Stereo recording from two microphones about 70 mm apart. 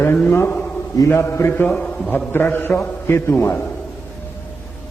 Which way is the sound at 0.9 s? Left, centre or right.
Left.